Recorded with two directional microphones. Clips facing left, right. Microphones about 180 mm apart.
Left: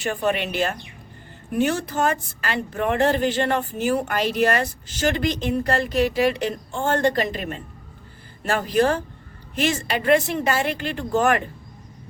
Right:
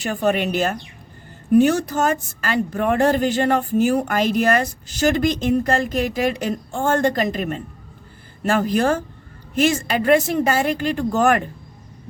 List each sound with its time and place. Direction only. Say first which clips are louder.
0.0 s speech: right 3 dB; 40° right (ahead or behind)